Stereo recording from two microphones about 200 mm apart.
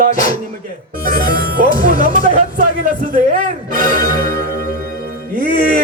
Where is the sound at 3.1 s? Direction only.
40° right (ahead or behind).